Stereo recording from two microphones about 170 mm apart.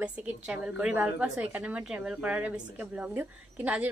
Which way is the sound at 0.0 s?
5° right (ahead or behind).